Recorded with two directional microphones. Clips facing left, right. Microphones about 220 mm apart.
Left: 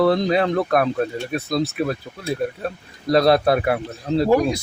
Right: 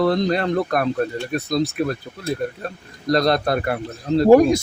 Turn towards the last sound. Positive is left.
turn(degrees=-45)  # may be behind; listen again after turning